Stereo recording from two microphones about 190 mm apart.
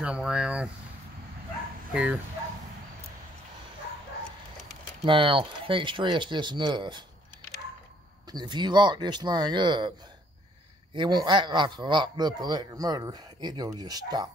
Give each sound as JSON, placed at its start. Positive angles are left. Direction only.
{"t": 0.0, "sound": "speech", "side_deg": -5}
{"t": 1.9, "sound": "speech", "side_deg": -5}
{"t": 5.0, "sound": "a man's voice", "side_deg": -25}
{"t": 8.3, "sound": "a man's voice", "side_deg": -20}
{"t": 11.0, "sound": "a man's voice", "side_deg": -25}